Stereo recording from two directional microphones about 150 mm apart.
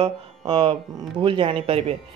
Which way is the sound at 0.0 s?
35° right (ahead or behind).